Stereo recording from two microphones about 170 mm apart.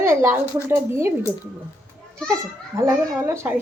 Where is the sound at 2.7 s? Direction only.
15° right (ahead or behind).